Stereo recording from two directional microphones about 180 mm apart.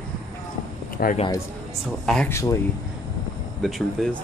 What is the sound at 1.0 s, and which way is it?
Speech, 55° left (ahead or behind).